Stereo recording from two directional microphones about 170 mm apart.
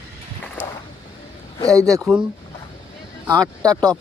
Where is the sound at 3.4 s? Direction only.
20° right (ahead or behind).